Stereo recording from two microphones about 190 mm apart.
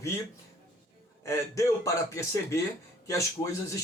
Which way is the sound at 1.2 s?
15° left (ahead or behind).